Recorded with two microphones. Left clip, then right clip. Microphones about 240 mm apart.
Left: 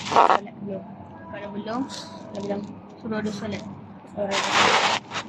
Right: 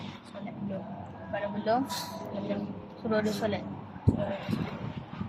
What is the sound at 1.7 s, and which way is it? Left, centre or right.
Speech, right.